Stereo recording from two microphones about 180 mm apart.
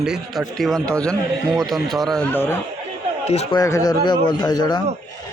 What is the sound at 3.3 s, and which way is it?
Speech, 35° left (ahead or behind).